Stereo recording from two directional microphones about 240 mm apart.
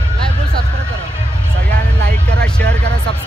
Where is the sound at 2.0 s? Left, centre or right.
Right.